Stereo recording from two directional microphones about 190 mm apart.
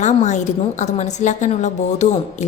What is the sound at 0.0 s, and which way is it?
A woman's voice, 40° left (ahead or behind).